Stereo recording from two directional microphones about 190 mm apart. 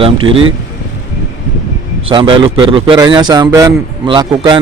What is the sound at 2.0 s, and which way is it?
A man's voice, 25° right (ahead or behind).